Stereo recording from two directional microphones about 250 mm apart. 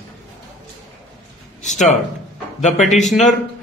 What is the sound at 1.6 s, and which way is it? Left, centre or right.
Speech, left.